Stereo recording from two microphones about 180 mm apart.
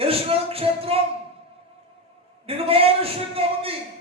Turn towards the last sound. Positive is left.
turn(degrees=-30)  # may be behind; listen again after turning